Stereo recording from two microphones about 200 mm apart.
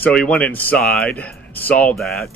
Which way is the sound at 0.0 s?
5° left (ahead or behind).